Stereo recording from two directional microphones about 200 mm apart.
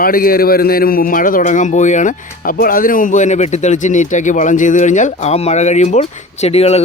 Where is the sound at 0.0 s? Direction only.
45° left (ahead or behind).